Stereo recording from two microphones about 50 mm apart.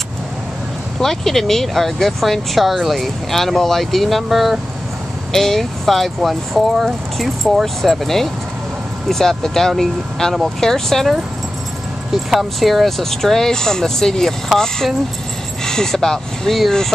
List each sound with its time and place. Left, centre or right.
1.0 s speech: centre
15.6 s speech: centre